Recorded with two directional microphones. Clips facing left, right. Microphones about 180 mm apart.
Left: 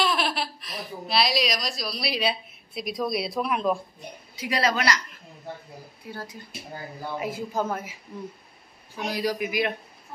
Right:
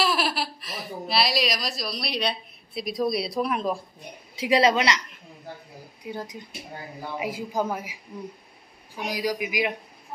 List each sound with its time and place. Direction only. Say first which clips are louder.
0.0 s baby laughter: right 1 dB; 5° right (ahead or behind)
4.4 s a woman's voice: right 5 dB; 25° right (ahead or behind)
6.0 s a man's voice: right 4 dB; 15° right (ahead or behind)